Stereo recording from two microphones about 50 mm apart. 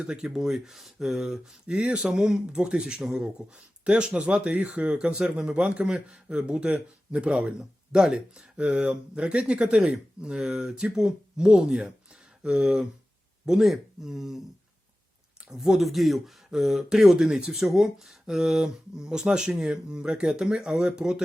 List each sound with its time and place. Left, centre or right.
0.1 s speech: centre
1.6 s a man's voice: centre
15.4 s speech: centre